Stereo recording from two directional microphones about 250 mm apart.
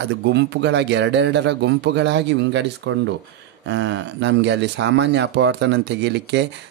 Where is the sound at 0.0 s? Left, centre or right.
Right.